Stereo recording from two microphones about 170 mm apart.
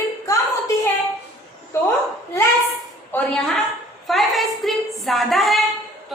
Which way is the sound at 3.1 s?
5° left (ahead or behind).